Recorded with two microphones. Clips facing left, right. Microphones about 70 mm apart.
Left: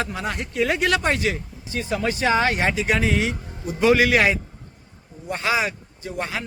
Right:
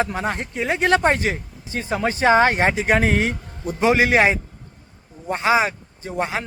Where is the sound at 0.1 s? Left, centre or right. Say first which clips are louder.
Right 3 dB; right.